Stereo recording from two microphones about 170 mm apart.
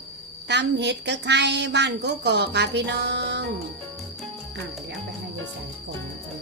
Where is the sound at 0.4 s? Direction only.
90° right.